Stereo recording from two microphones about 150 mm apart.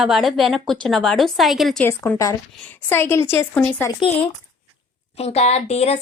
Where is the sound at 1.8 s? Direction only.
15° left (ahead or behind).